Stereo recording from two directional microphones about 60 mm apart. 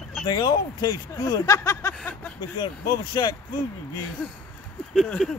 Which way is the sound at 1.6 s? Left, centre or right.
Left.